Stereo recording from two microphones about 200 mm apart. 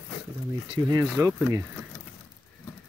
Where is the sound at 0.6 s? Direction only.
20° right (ahead or behind).